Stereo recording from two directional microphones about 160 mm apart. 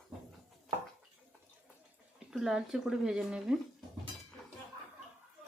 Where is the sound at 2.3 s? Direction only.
Centre (ahead or behind).